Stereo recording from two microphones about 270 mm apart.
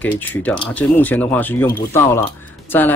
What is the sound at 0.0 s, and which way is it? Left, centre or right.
A man's voice, centre.